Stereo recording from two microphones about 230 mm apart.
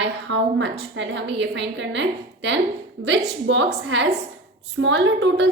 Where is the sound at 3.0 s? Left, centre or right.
Right.